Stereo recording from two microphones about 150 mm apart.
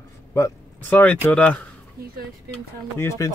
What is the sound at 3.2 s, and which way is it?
Speech, 20° left (ahead or behind).